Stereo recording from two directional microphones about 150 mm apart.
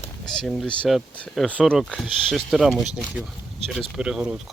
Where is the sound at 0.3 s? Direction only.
Centre (ahead or behind).